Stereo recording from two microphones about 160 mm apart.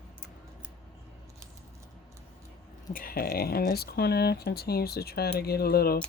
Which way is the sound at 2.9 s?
65° left (ahead or behind).